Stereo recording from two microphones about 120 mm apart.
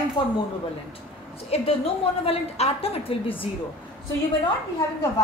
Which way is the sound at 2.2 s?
55° left (ahead or behind).